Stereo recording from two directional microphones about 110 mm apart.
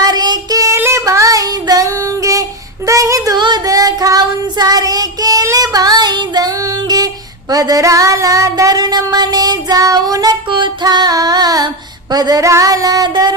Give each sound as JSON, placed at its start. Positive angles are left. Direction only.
{"t": 0.0, "sound": "music", "side_deg": -40}
{"t": 0.8, "sound": "child singing", "side_deg": -25}
{"t": 7.5, "sound": "a sound", "side_deg": -35}